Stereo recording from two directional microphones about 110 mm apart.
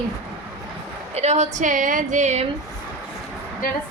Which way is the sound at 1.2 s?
90° right.